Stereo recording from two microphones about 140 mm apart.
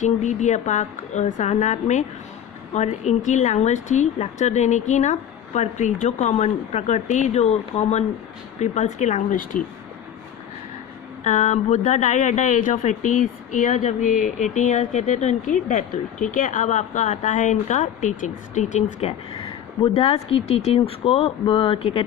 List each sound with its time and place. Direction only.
0.0 s speech: 55° left (ahead or behind); by 9.6 s 75° left (ahead or behind)
11.2 s speech: 60° left (ahead or behind); by 22.0 s 40° left (ahead or behind)